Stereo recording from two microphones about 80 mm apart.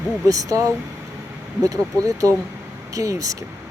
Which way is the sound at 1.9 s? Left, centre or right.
Right.